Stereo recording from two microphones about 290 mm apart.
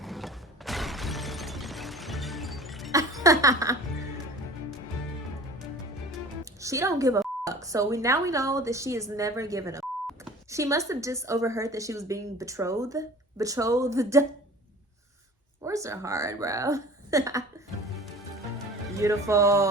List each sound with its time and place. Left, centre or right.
0.0 s mechanisms: centre
3.2 s a woman's voice: centre
6.4 s music: centre
7.4 s a woman's voice: centre
15.6 s a woman's voice: centre
18.9 s speech: centre